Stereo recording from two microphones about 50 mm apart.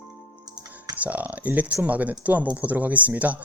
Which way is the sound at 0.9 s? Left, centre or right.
Right.